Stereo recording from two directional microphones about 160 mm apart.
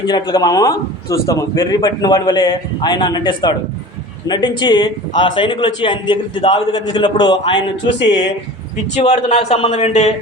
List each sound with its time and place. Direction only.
0.1 s a man's voice: 25° left (ahead or behind)
7.9 s speech: 90° left
9.0 s a man's voice: 45° left (ahead or behind)